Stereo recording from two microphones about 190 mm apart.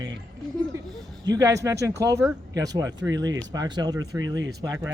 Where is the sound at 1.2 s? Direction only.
20° right (ahead or behind).